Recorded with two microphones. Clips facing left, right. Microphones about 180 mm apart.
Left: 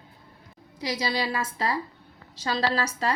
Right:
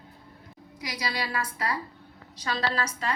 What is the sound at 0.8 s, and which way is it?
A woman's voice, 30° left (ahead or behind).